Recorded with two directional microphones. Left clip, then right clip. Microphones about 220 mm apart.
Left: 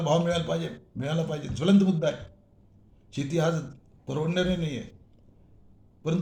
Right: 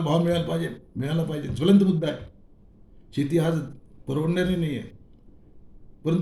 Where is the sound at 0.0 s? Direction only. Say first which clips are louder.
Right 1 dB; 5° right (ahead or behind).